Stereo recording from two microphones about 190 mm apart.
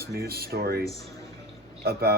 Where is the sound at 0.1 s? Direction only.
55° right (ahead or behind).